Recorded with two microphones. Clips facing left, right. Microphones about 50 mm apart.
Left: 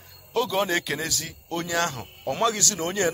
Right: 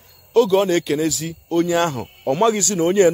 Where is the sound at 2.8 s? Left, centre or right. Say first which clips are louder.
Right 11 dB; centre.